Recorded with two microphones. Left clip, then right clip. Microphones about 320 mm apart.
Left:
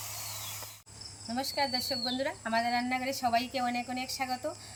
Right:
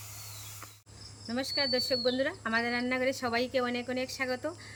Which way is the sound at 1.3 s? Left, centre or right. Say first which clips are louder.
Right 1 dB; centre.